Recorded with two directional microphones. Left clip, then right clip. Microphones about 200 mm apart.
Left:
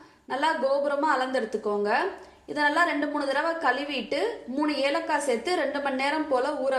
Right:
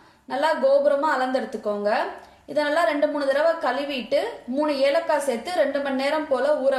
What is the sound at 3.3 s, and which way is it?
Speech, 20° left (ahead or behind).